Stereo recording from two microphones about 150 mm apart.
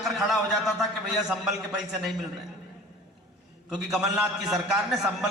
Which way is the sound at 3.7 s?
Centre (ahead or behind).